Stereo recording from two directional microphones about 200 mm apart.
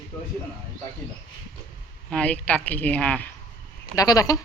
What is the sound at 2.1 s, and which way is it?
Speech, 5° left (ahead or behind).